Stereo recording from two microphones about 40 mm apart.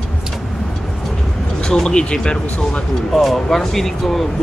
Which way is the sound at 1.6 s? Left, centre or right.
Centre.